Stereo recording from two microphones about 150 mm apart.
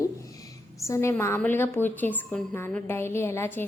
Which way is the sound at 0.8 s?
20° left (ahead or behind).